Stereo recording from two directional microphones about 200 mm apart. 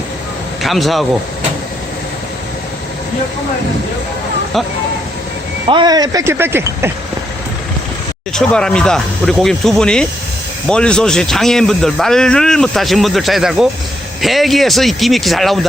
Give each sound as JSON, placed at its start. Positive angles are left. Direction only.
{"t": 0.6, "sound": "a man's voice", "side_deg": 0}
{"t": 5.6, "sound": "speech", "side_deg": -20}
{"t": 8.3, "sound": "a man's voice", "side_deg": 5}